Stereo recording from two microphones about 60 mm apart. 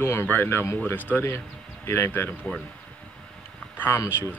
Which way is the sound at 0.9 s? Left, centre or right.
Left.